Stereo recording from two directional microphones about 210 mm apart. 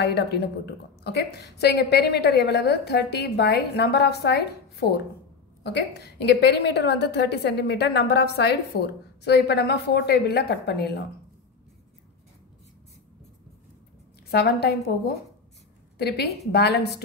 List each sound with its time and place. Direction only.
0.0 s a woman's voice: 50° left (ahead or behind)
14.3 s a woman's voice: 50° left (ahead or behind)